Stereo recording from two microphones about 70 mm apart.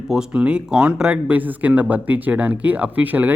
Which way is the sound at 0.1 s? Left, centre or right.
Centre.